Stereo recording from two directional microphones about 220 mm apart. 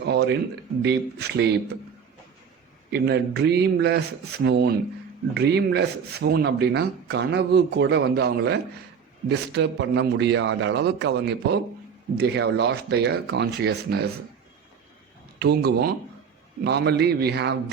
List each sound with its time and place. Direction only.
0.0 s a sound: 50° right (ahead or behind)
0.8 s speech: 50° right (ahead or behind)
2.9 s speech: 50° right (ahead or behind)
15.4 s speech: 50° right (ahead or behind)